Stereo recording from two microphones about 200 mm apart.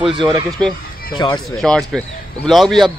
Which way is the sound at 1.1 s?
20° left (ahead or behind).